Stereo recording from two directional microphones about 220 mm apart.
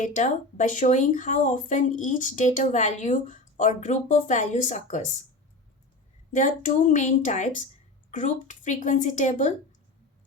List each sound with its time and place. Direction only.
0.0 s speech: 35° left (ahead or behind)
6.3 s speech: 35° left (ahead or behind)